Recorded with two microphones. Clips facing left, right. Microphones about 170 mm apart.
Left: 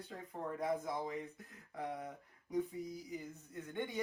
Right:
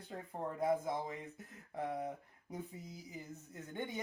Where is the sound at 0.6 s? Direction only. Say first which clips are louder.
Right 3 dB; 25° right (ahead or behind).